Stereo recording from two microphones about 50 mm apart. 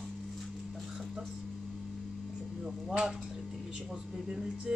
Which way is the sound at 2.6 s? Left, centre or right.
Centre.